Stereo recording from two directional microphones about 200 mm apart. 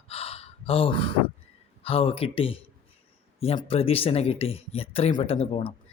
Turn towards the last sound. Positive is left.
turn(degrees=30)  # may be behind; listen again after turning